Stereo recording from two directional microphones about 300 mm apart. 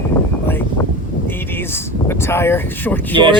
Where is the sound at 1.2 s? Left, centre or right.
Centre.